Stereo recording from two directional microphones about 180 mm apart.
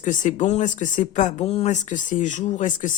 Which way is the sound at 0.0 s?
45° left (ahead or behind).